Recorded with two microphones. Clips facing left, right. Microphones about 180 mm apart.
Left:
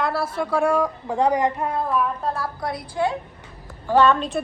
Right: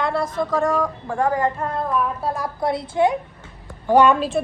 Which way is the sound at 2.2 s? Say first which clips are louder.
Right 1 dB; 10° right (ahead or behind).